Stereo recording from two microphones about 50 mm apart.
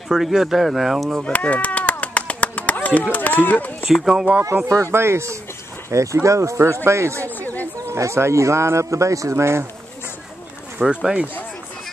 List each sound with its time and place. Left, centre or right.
0.1 s speech: centre
1.2 s a sound: left
3.9 s speech: centre
4.9 s speech: right
6.2 s speech: right
7.2 s a sound: left
7.8 s speech: right
10.8 s speech: centre